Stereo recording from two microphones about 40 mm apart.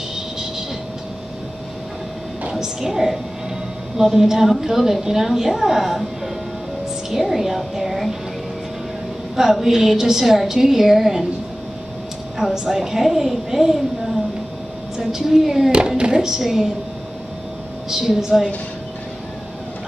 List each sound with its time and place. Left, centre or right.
0.1 s train: centre
2.5 s a woman's voice: centre
7.1 s a woman's voice: centre
9.4 s a woman's voice: centre
12.4 s a woman's voice: centre
16.0 s a woman's voice: centre
17.8 s a woman's voice: centre